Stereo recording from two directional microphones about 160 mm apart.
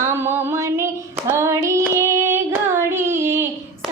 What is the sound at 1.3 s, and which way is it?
Hands, 15° right (ahead or behind).